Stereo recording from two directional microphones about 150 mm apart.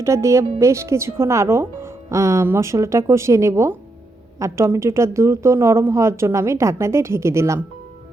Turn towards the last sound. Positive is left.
turn(degrees=-20)  # may be behind; listen again after turning